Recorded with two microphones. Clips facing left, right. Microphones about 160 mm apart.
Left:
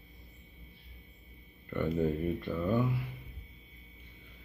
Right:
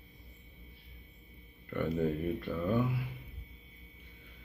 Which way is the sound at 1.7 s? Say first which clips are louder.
Left 1 dB; centre (ahead or behind).